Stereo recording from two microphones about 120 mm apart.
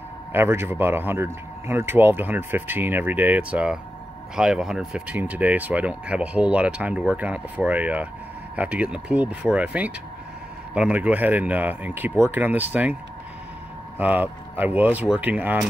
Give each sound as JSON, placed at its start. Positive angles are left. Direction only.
{"t": 0.3, "sound": "speech", "side_deg": -20}
{"t": 13.9, "sound": "speech", "side_deg": -15}